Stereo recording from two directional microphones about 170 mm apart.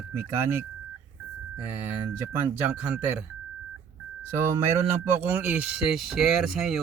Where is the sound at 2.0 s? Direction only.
15° right (ahead or behind).